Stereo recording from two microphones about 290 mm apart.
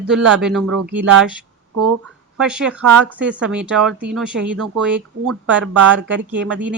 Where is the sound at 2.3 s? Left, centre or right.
Centre.